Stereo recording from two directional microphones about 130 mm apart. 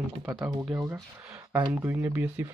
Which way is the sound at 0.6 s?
10° right (ahead or behind).